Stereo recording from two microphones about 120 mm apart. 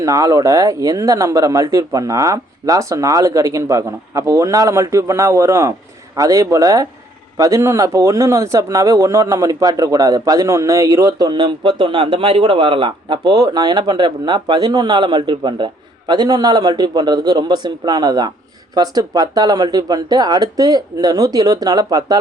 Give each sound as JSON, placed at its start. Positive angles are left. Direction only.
{"t": 0.0, "sound": "a man's voice", "side_deg": -30}